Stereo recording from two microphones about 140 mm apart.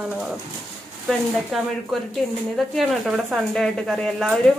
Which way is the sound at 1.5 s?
Centre (ahead or behind).